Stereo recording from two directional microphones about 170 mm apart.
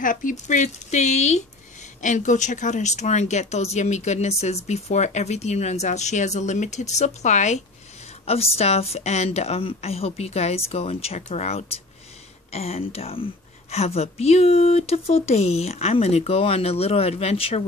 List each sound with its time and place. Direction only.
0.0 s a woman's voice: 50° left (ahead or behind); by 17.6 s 35° left (ahead or behind)